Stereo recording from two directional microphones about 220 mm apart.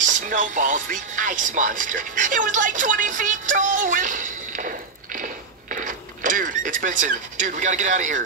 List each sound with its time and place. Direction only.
0.0 s speech: 35° right (ahead or behind)